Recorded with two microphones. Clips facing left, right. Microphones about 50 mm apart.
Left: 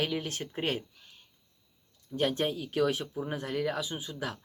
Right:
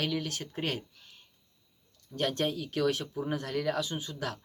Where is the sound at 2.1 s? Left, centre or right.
Centre.